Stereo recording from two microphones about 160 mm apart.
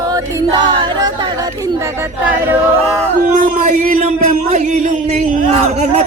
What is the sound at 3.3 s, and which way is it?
Speech, 50° right (ahead or behind).